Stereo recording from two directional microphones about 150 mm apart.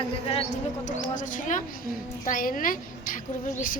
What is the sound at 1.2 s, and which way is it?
A woman's voice, 60° left (ahead or behind).